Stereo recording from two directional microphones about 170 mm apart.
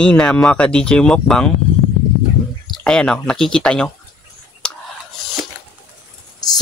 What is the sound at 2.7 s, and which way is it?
Speech, 5° left (ahead or behind).